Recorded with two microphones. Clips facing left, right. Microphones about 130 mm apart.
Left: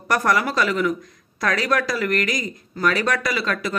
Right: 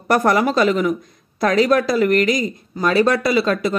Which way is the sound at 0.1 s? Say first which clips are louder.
Right 5 dB; 25° right (ahead or behind).